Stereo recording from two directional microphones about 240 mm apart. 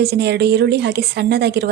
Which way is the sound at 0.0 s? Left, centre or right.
Right.